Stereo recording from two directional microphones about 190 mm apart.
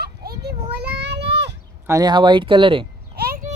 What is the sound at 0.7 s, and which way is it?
Child singing, 60° right (ahead or behind).